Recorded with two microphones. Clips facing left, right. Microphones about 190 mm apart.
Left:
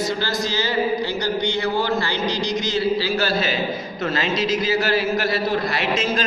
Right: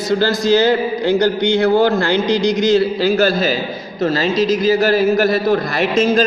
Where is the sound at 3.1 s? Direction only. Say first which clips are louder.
Right 7 dB; 45° right (ahead or behind).